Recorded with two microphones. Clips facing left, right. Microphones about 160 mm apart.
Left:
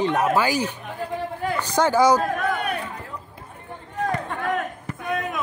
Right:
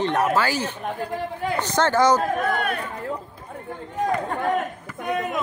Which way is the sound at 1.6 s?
10° left (ahead or behind).